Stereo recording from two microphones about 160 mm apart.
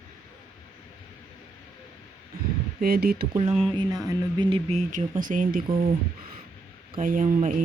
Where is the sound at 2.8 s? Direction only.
65° right (ahead or behind).